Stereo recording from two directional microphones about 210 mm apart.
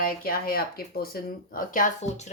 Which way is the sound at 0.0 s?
45° left (ahead or behind).